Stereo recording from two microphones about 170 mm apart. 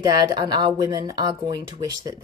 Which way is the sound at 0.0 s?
25° right (ahead or behind).